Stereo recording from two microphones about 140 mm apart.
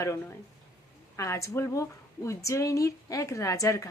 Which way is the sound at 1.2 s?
20° left (ahead or behind).